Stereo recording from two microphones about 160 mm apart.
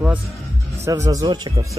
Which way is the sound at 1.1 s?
25° right (ahead or behind).